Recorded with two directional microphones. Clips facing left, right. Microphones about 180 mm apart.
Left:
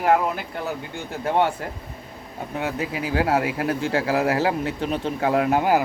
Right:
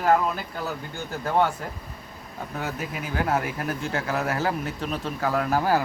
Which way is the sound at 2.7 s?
90° left.